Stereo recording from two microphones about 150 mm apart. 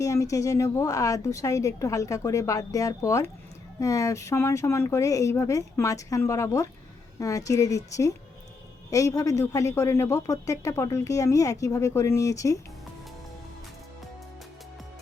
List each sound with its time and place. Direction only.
0.0 s speech: 20° left (ahead or behind)